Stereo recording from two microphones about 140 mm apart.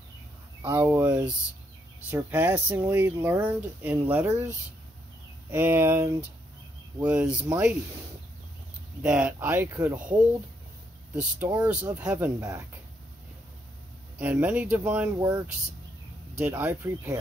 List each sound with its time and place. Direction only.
0.7 s speech: 15° right (ahead or behind)
5.5 s speech: 15° right (ahead or behind)
9.0 s speech: 10° right (ahead or behind)
12.4 s speech: 20° right (ahead or behind)
14.1 s speech: 10° right (ahead or behind)
15.1 s speech: 25° right (ahead or behind)
16.3 s speech: 15° right (ahead or behind)